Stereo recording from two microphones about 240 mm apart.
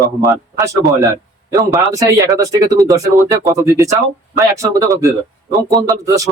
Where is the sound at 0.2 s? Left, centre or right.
Centre.